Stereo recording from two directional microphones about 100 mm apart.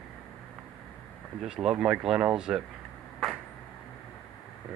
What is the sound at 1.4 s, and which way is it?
Speech, 5° right (ahead or behind).